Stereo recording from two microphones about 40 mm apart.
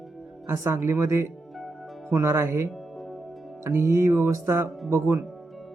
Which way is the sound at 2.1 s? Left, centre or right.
Right.